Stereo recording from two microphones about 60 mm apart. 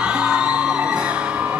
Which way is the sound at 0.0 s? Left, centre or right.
Centre.